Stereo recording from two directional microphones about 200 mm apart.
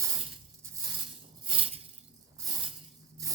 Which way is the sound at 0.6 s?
20° right (ahead or behind).